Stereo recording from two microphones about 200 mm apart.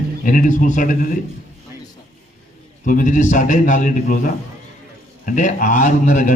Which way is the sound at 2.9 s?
40° left (ahead or behind).